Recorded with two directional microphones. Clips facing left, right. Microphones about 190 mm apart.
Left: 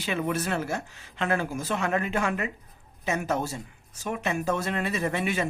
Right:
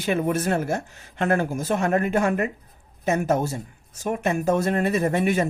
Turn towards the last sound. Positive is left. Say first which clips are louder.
# right 6 dB
turn(degrees=-45)  # may be behind; listen again after turning